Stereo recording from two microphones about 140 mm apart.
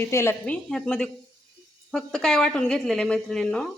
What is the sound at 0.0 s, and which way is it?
Speech, 20° left (ahead or behind).